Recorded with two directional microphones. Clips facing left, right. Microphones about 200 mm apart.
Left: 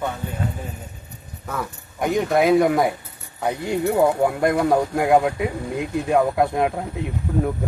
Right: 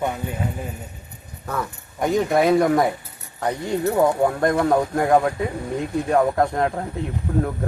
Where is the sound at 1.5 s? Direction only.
Centre (ahead or behind).